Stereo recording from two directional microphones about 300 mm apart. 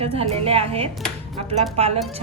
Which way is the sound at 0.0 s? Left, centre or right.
Centre.